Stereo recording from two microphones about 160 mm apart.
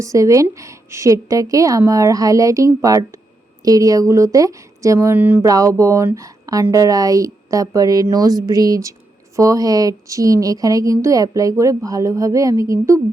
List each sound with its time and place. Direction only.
0.0 s a woman's voice: 20° right (ahead or behind)